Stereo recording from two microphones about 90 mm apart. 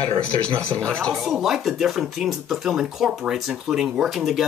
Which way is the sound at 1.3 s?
Centre (ahead or behind).